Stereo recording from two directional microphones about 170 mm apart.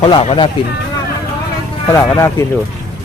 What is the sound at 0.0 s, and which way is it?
Speech, 30° left (ahead or behind).